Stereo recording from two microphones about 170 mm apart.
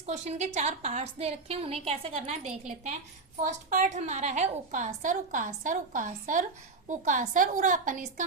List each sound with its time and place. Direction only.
0.0 s a woman's voice: 45° right (ahead or behind)